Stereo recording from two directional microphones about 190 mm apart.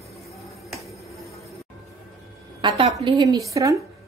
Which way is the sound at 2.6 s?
25° right (ahead or behind).